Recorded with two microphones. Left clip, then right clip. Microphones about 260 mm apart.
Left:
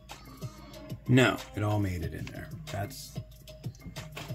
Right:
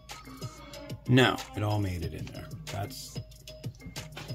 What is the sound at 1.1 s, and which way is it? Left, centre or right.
Speech, centre.